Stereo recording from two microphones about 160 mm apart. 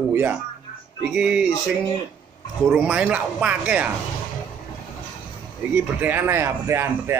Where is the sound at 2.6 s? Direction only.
5° right (ahead or behind).